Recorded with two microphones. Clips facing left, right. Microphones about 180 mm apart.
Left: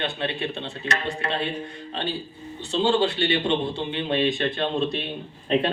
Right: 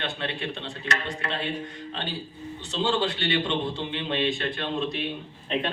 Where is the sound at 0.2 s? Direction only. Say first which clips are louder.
Left 4 dB; 25° left (ahead or behind).